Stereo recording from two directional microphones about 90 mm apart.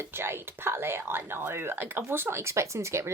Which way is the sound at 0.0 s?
25° right (ahead or behind).